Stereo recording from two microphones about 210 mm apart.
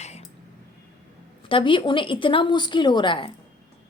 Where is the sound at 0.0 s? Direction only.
30° left (ahead or behind).